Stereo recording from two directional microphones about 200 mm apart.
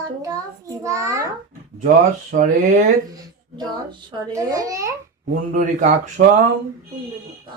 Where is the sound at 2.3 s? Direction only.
40° right (ahead or behind).